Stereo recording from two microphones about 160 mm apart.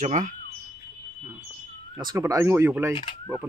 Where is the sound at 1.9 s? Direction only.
20° right (ahead or behind).